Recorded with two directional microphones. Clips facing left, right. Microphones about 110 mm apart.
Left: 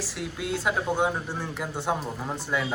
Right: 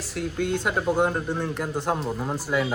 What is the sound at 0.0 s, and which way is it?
Speech, centre (ahead or behind).